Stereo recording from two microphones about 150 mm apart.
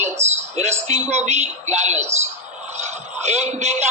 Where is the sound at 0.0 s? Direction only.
50° right (ahead or behind).